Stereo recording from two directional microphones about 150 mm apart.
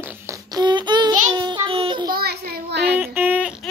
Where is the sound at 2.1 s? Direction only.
90° right.